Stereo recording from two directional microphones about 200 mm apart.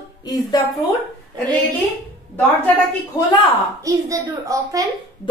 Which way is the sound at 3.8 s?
15° right (ahead or behind).